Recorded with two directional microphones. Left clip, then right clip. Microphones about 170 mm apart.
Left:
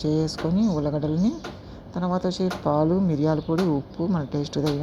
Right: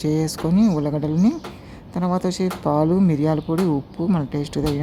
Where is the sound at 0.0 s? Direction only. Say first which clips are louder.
Right 2 dB; 15° right (ahead or behind).